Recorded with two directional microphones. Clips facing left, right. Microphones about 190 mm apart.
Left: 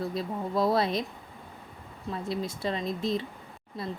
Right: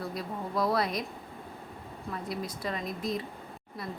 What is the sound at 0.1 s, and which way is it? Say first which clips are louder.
Speech: left 4 dB; 25° left (ahead or behind).